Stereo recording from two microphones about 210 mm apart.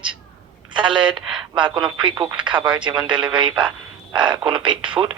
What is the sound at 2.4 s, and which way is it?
Speech, 20° right (ahead or behind).